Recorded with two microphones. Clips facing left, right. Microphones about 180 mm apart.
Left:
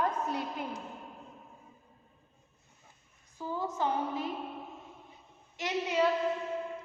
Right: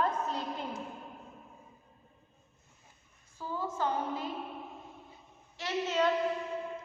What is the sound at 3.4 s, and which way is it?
Speech, 15° left (ahead or behind).